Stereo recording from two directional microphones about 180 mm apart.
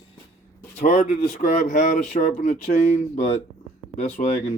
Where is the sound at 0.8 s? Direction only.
40° left (ahead or behind).